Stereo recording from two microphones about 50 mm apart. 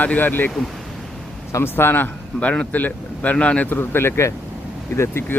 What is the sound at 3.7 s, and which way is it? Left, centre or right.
Speech, left.